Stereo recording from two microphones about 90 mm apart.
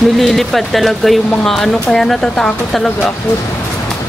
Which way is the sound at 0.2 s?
5° left (ahead or behind).